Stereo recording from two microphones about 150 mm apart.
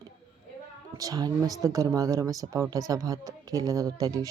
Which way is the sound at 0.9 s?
25° right (ahead or behind).